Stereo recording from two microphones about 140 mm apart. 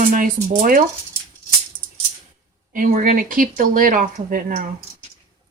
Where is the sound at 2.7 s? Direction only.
70° right (ahead or behind).